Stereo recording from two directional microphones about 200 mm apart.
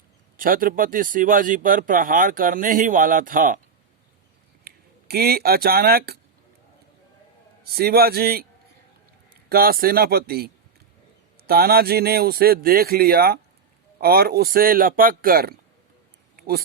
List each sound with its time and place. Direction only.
0.3 s speech: 45° right (ahead or behind)
4.6 s speech: 50° right (ahead or behind)
7.7 s speech: 50° right (ahead or behind)
9.5 s speech: 50° right (ahead or behind)